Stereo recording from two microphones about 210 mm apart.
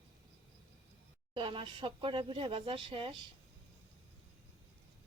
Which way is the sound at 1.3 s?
25° right (ahead or behind).